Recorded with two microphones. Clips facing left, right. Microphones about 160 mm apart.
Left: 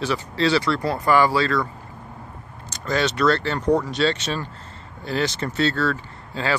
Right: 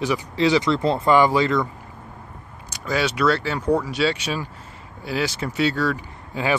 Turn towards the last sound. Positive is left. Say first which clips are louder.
# right 2 dB
turn(degrees=-15)  # may be behind; listen again after turning